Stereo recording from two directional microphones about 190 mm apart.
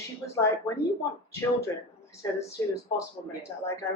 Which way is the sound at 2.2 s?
15° left (ahead or behind).